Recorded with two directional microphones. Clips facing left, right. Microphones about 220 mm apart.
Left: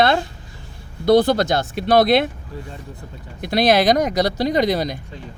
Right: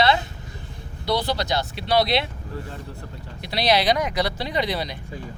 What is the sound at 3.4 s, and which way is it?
Speech, 50° left (ahead or behind).